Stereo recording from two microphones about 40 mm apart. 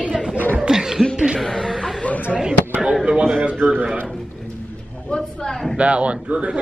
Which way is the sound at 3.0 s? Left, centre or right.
Right.